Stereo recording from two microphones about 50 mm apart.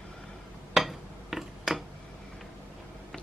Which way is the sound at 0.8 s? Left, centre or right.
Centre.